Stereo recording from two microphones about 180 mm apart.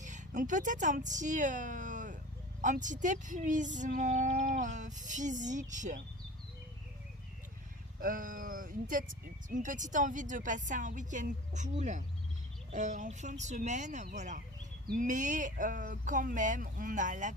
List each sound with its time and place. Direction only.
0.0 s speech: 45° right (ahead or behind)
8.0 s speech: 50° right (ahead or behind)